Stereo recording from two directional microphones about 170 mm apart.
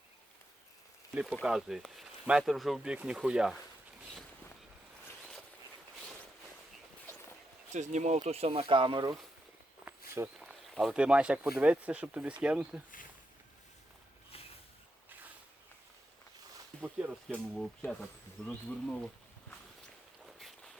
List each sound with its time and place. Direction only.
1.1 s speech: 5° right (ahead or behind)
7.7 s speech: 45° right (ahead or behind)
10.4 s speech: centre (ahead or behind)
16.8 s speech: 5° right (ahead or behind)